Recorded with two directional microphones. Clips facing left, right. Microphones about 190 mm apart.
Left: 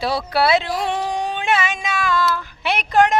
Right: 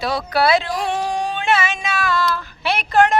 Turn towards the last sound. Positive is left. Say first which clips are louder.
# even
turn(degrees=15)  # may be behind; listen again after turning